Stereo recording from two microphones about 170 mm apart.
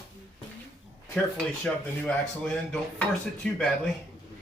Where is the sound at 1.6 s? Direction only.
5° left (ahead or behind).